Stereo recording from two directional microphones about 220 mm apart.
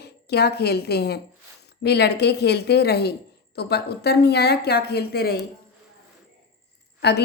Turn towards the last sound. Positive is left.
turn(degrees=50)  # may be behind; listen again after turning